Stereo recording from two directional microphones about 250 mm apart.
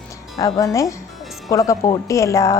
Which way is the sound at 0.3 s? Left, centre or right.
Centre.